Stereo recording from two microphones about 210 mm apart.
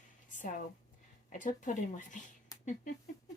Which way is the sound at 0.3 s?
40° left (ahead or behind).